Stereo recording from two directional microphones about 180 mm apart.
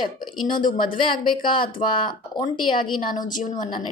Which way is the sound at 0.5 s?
50° left (ahead or behind).